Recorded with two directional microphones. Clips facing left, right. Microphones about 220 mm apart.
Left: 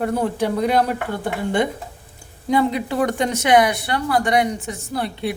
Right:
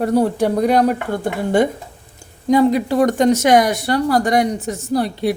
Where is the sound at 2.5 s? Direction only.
40° right (ahead or behind).